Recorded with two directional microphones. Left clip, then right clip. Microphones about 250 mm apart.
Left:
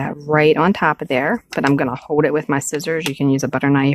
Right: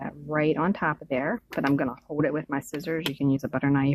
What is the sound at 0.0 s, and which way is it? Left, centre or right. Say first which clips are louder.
Speech: left 12 dB; left.